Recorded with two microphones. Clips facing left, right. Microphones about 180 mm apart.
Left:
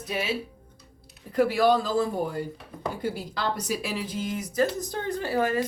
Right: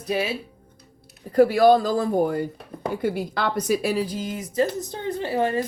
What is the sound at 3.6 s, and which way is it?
A woman's voice, 45° right (ahead or behind).